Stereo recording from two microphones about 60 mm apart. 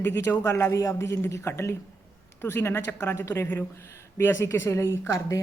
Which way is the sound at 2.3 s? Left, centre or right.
Left.